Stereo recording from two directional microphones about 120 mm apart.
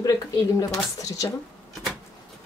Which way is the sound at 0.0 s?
30° left (ahead or behind).